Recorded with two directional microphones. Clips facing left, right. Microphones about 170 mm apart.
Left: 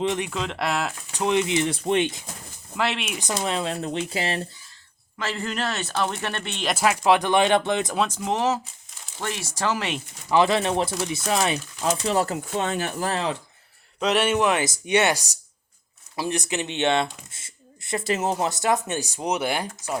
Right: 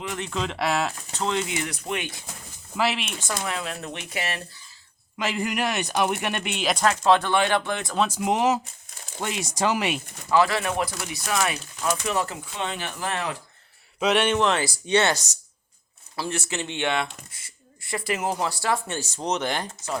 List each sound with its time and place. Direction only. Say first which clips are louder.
0.0 s speech: left 7 dB; 20° left (ahead or behind)
0.3 s speech: right 1 dB; centre (ahead or behind)
1.1 s speech: left 7 dB; 15° left (ahead or behind)
2.7 s speech: right 1 dB; 5° right (ahead or behind)
3.1 s speech: left 4 dB; 15° left (ahead or behind)
5.1 s speech: right 2 dB; 15° right (ahead or behind)
6.7 s speech: even; 10° left (ahead or behind)
8.0 s speech: right 2 dB; 10° right (ahead or behind)
10.3 s speech: left 2 dB; 20° left (ahead or behind); by 13.1 s 40° left (ahead or behind)
13.1 s speech: left 3 dB; 25° left (ahead or behind)
14.0 s speech: even; centre (ahead or behind)